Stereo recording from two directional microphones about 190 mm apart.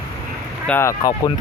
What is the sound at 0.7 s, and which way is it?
Speech, 15° left (ahead or behind).